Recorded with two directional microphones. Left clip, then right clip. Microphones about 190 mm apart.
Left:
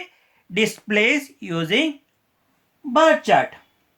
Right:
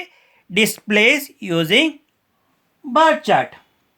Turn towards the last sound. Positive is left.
turn(degrees=-40)  # may be behind; listen again after turning